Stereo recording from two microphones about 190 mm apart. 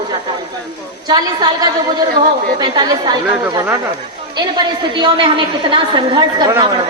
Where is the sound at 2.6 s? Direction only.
20° right (ahead or behind).